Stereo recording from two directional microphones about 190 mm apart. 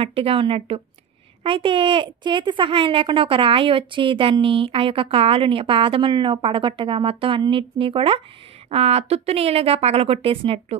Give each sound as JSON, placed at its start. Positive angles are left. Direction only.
{"t": 0.0, "sound": "a woman's voice", "side_deg": -30}